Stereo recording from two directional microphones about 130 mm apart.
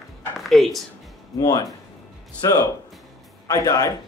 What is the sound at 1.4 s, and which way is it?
A man's voice, 30° left (ahead or behind).